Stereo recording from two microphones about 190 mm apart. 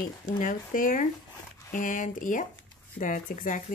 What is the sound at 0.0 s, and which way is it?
Speech, 45° left (ahead or behind).